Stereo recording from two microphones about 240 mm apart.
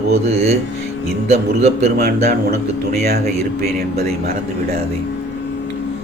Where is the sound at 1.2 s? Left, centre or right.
Right.